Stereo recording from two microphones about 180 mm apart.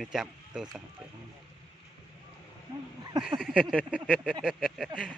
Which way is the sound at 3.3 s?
5° right (ahead or behind).